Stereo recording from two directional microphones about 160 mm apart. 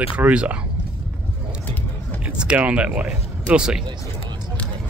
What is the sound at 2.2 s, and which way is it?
Speech, 10° right (ahead or behind).